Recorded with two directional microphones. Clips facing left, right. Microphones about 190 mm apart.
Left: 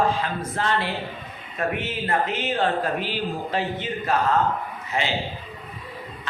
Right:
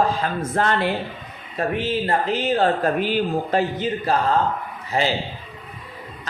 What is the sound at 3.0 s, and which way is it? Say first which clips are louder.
Speech: right 6 dB; 45° right (ahead or behind).